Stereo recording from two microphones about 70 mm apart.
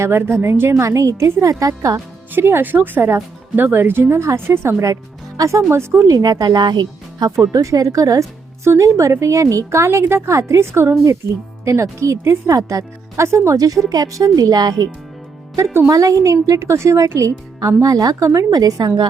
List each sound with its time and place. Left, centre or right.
0.1 s speech: right
0.7 s a woman's voice: right
2.3 s speech: right
5.4 s a woman's voice: right
6.1 s speech: right
7.3 s a woman's voice: right
13.9 s speech: right
15.5 s a woman's voice: right